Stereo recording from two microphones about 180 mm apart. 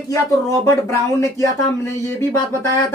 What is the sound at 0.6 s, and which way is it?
Speech, 15° left (ahead or behind).